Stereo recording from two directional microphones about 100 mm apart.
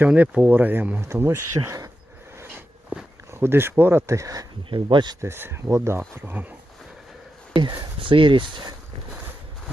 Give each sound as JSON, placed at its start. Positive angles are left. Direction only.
{"t": 0.1, "sound": "speech", "side_deg": -15}
{"t": 3.3, "sound": "speech", "side_deg": -25}
{"t": 4.7, "sound": "speech", "side_deg": -55}
{"t": 5.2, "sound": "speech", "side_deg": -25}
{"t": 7.5, "sound": "speech", "side_deg": -50}